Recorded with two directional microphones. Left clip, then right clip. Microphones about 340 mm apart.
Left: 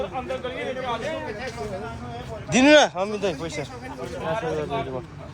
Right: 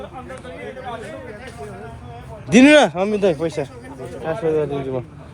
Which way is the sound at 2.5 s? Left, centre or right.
Right.